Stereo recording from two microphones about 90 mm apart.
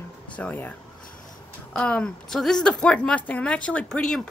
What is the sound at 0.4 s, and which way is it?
A woman's voice, 15° left (ahead or behind).